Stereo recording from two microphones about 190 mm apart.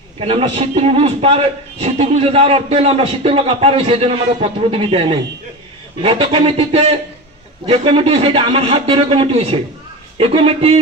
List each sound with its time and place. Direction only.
0.2 s a man's voice: 30° right (ahead or behind)